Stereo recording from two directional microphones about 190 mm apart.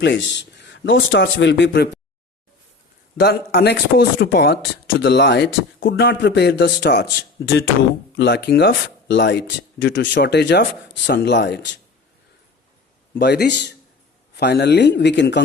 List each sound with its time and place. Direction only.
0.0 s speech: 70° left (ahead or behind)
3.2 s speech: 60° left (ahead or behind); by 7.6 s 80° left
8.1 s speech: 65° left (ahead or behind)
13.1 s speech: 60° left (ahead or behind)